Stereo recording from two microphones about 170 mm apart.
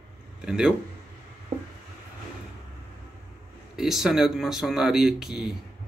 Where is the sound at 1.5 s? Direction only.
35° right (ahead or behind).